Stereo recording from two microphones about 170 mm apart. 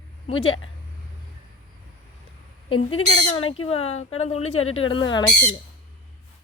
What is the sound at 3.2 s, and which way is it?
Speech, 35° left (ahead or behind).